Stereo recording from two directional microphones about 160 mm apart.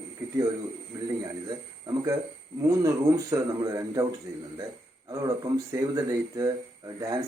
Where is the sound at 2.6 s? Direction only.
20° right (ahead or behind).